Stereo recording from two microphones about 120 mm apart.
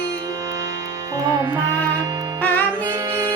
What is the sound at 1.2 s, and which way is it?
Music, 35° right (ahead or behind).